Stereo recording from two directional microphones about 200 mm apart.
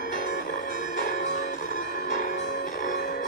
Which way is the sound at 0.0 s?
40° left (ahead or behind).